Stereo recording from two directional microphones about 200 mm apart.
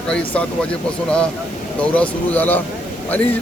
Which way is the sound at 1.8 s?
5° left (ahead or behind).